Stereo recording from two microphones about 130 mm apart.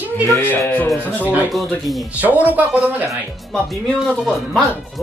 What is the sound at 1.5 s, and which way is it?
Speech, centre (ahead or behind).